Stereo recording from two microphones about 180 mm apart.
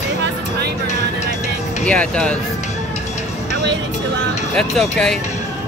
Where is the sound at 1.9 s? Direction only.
5° left (ahead or behind).